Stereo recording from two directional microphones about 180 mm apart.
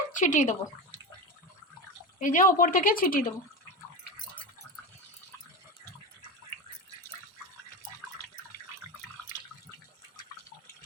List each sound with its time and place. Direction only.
0.2 s speech: 45° left (ahead or behind)
2.1 s speech: 45° left (ahead or behind)
9.2 s water: 10° left (ahead or behind)